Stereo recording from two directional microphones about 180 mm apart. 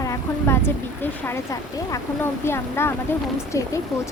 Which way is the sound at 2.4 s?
15° left (ahead or behind).